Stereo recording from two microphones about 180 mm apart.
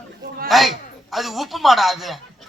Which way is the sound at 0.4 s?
Centre (ahead or behind).